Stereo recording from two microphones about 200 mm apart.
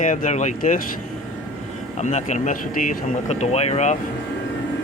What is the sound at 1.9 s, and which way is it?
Speech, 35° left (ahead or behind).